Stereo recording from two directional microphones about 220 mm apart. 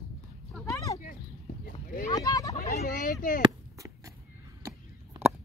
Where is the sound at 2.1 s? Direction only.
15° left (ahead or behind).